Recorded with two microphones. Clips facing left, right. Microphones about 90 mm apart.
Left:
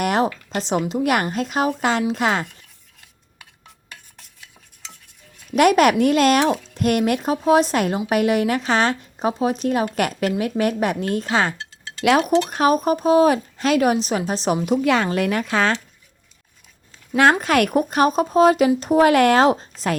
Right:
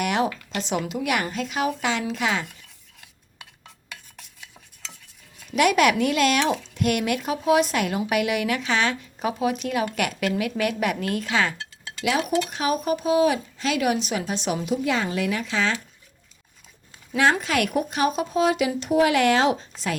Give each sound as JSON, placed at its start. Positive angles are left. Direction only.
{"t": 0.0, "sound": "a woman's voice", "side_deg": 40}
{"t": 5.5, "sound": "a woman's voice", "side_deg": 45}
{"t": 12.5, "sound": "speech", "side_deg": 45}
{"t": 14.7, "sound": "speech", "side_deg": 60}
{"t": 17.4, "sound": "speech", "side_deg": 50}